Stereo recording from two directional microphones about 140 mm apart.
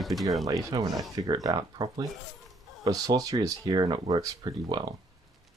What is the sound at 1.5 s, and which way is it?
Speech, 30° right (ahead or behind).